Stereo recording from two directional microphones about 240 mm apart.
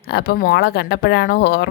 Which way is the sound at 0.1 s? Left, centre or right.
Left.